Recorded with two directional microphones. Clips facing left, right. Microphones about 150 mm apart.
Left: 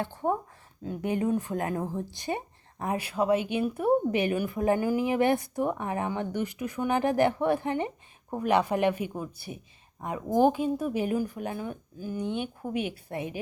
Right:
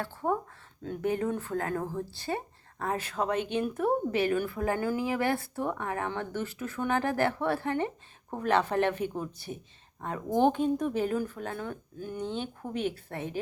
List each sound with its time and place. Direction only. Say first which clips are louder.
0.0 s speech: left 2 dB; 20° left (ahead or behind)